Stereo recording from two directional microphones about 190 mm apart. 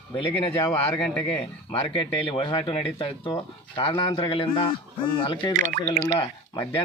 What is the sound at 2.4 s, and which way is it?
A man's voice, 25° left (ahead or behind).